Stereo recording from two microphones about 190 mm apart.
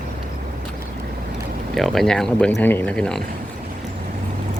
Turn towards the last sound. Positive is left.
turn(degrees=5)  # may be behind; listen again after turning